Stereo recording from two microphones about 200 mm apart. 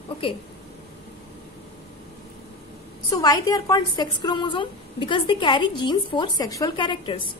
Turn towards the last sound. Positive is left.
turn(degrees=25)  # may be behind; listen again after turning